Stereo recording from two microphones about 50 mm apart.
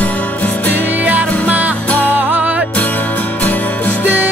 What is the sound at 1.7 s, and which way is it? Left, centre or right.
Music, left.